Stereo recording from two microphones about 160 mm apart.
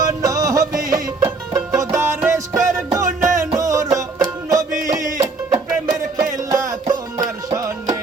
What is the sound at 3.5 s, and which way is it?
Music, 20° right (ahead or behind).